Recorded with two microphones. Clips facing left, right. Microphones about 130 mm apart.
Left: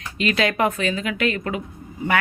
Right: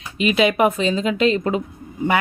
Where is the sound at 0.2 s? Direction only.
15° right (ahead or behind).